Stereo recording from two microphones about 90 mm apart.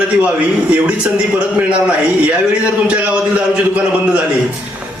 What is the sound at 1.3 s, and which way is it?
A man's voice, 15° right (ahead or behind).